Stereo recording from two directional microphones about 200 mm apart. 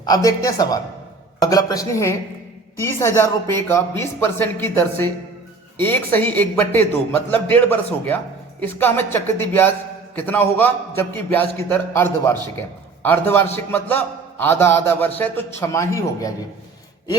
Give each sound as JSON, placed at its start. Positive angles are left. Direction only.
{"t": 0.0, "sound": "a woman's voice", "side_deg": 20}